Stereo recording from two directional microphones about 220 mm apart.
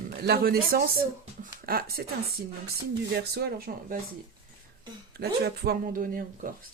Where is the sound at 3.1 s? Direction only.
45° right (ahead or behind).